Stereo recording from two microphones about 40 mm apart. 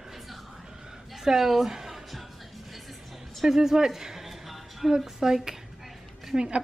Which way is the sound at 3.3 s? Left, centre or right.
Centre.